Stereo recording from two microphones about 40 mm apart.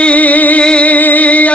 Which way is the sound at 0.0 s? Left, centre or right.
Left.